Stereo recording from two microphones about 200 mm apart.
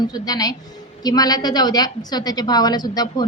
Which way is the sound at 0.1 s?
20° left (ahead or behind).